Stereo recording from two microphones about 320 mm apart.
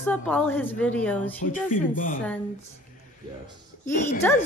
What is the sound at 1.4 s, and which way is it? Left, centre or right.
Speech, left.